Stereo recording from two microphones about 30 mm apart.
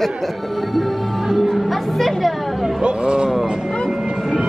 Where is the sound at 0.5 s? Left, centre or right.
Centre.